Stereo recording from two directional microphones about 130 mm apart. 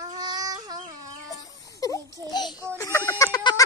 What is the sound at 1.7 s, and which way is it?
Speech, 25° left (ahead or behind).